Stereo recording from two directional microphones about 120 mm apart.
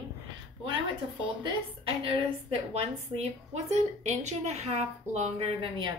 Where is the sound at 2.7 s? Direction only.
65° right (ahead or behind).